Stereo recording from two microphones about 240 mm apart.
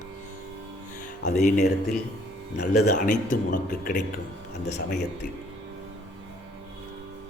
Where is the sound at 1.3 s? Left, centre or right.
Left.